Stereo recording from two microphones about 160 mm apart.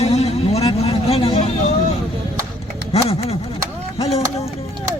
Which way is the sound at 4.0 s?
40° left (ahead or behind).